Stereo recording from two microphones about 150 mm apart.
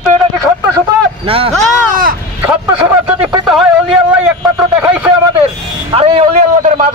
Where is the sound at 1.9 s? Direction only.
70° right (ahead or behind).